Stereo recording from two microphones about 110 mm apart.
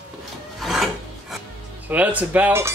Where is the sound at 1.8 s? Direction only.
15° right (ahead or behind).